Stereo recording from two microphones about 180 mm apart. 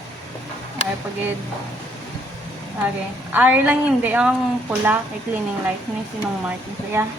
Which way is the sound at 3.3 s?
10° right (ahead or behind).